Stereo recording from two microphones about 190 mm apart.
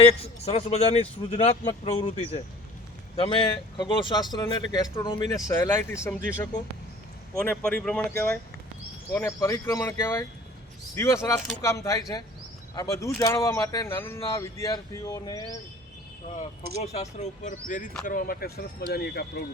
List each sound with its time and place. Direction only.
0.0 s a man's voice: 35° left (ahead or behind); by 6.2 s 15° left (ahead or behind)
7.3 s speech: 5° left (ahead or behind); by 15.4 s 20° left (ahead or behind)
16.4 s a man's voice: 35° left (ahead or behind); by 19.2 s 55° left (ahead or behind)